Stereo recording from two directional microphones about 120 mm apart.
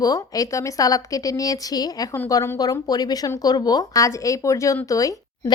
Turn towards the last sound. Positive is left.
turn(degrees=30)  # may be behind; listen again after turning